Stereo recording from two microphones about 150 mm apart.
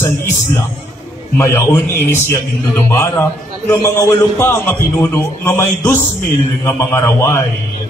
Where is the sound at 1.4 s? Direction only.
15° left (ahead or behind).